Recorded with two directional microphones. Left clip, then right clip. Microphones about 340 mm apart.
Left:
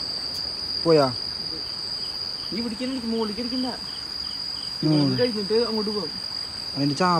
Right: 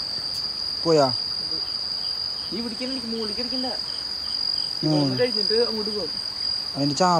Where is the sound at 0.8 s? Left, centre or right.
Centre.